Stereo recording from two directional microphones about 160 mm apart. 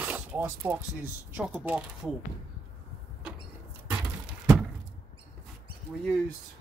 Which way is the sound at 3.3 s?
5° right (ahead or behind).